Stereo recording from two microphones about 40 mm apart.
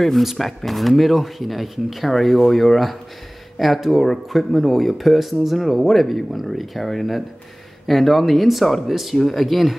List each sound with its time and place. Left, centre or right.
0.4 s speech: centre